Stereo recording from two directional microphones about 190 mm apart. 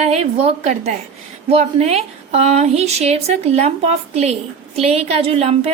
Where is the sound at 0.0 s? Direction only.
35° right (ahead or behind).